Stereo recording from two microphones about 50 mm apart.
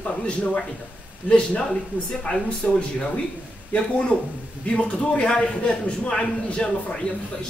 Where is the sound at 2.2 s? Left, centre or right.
Centre.